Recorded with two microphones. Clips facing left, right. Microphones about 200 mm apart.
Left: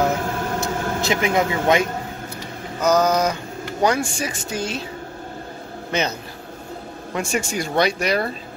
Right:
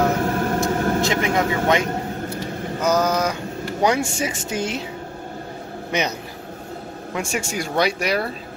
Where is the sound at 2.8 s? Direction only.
5° right (ahead or behind).